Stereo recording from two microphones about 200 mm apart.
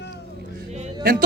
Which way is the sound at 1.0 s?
45° right (ahead or behind).